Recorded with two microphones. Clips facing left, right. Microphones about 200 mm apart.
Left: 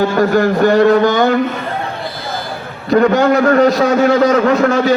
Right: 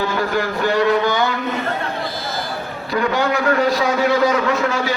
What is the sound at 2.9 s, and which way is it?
A man's voice, 45° left (ahead or behind).